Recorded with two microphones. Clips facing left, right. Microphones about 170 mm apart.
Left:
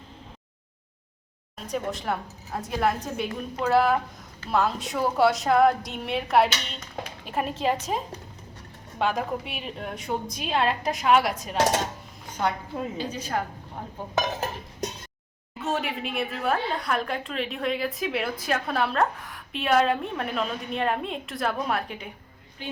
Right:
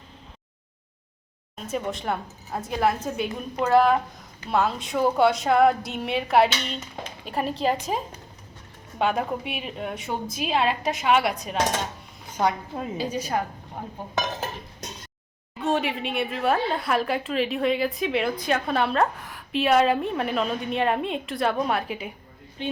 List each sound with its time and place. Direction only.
1.6 s a woman's voice: centre (ahead or behind)
13.0 s a woman's voice: 10° right (ahead or behind)
14.2 s dishes: 5° left (ahead or behind)
15.6 s a woman's voice: centre (ahead or behind)
22.6 s speech: 25° right (ahead or behind)